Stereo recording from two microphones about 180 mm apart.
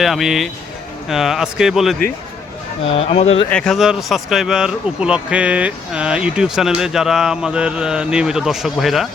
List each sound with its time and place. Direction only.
0.0 s speech: centre (ahead or behind)
2.9 s speech: 30° left (ahead or behind)
3.5 s speech: 5° left (ahead or behind)